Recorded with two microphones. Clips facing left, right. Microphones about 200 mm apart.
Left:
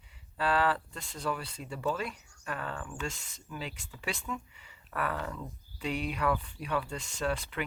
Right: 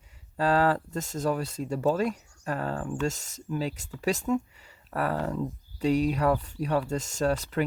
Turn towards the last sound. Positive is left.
turn(degrees=-40)  # may be behind; listen again after turning